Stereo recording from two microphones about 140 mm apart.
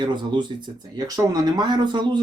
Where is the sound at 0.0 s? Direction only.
35° right (ahead or behind).